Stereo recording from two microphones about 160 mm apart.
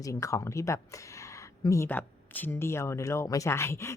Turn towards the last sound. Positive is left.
turn(degrees=15)  # may be behind; listen again after turning